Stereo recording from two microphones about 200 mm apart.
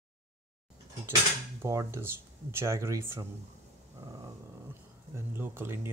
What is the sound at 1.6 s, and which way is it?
Speech, 15° right (ahead or behind).